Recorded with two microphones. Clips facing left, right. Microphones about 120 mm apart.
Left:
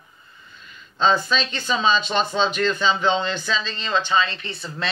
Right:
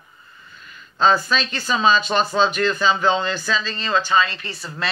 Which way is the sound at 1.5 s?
45° right (ahead or behind).